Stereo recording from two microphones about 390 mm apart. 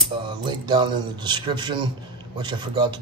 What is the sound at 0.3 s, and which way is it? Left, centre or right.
A man's voice, centre.